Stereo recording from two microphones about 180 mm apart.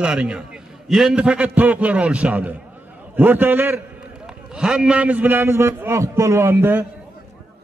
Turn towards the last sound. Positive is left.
turn(degrees=-15)  # may be behind; listen again after turning